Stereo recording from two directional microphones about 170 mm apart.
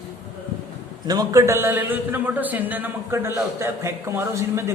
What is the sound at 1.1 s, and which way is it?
A man's voice, 20° right (ahead or behind).